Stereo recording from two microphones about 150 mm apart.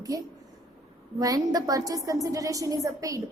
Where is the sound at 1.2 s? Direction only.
25° right (ahead or behind).